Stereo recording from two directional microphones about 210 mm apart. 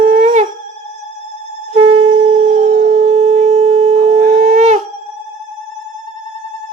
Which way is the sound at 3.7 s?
30° right (ahead or behind).